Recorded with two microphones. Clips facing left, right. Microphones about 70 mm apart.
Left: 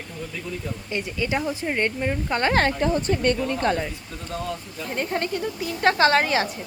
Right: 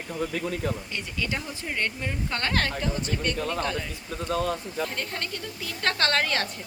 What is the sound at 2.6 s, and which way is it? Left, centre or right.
Speech, left.